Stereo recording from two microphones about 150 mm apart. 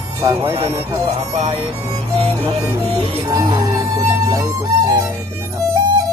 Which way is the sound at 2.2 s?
35° right (ahead or behind).